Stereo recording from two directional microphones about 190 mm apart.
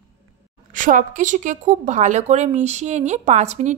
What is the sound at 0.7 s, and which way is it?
Speech, 45° right (ahead or behind).